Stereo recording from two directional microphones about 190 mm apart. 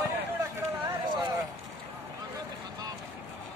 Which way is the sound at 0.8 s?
20° right (ahead or behind).